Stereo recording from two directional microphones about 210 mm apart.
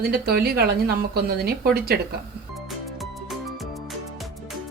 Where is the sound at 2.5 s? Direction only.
Centre (ahead or behind).